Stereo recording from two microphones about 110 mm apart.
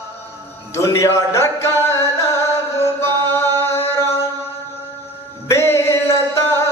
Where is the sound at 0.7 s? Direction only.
25° left (ahead or behind).